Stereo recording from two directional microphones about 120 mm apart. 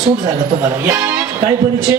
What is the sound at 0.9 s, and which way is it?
Speech, 35° right (ahead or behind).